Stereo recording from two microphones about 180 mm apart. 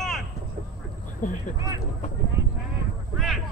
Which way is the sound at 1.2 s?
45° left (ahead or behind).